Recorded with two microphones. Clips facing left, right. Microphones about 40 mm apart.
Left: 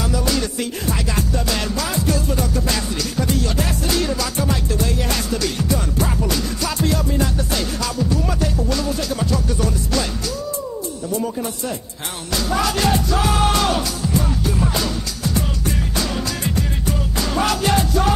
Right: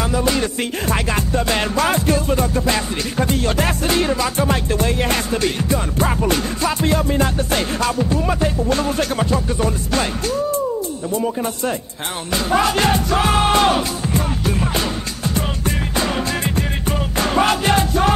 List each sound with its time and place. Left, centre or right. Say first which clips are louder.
0.0 s music: right 3 dB; right
12.4 s music: right 3 dB; right